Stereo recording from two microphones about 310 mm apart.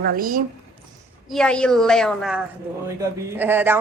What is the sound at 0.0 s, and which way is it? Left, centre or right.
Speech, right.